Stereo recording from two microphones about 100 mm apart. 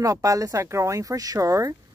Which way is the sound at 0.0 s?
35° right (ahead or behind).